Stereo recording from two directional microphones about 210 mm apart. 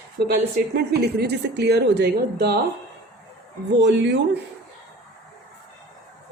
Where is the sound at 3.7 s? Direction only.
55° right (ahead or behind).